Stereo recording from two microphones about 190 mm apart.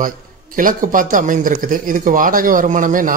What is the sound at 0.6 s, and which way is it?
Speech, 45° right (ahead or behind).